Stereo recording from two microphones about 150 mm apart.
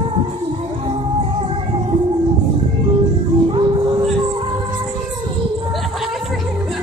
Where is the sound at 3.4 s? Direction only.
35° right (ahead or behind).